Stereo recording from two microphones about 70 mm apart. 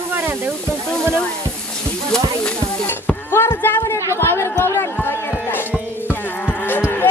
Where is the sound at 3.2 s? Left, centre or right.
Left.